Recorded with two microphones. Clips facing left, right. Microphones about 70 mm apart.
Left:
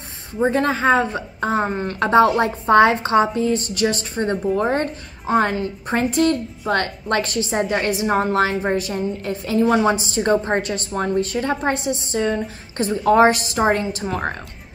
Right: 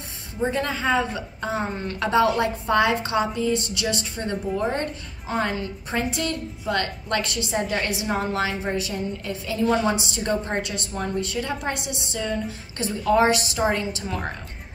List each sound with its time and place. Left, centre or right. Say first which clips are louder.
0.4 s a woman's voice: left 6 dB; left